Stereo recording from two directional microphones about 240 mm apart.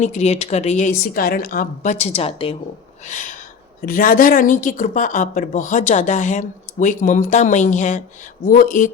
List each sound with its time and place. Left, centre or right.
0.0 s a woman's voice: left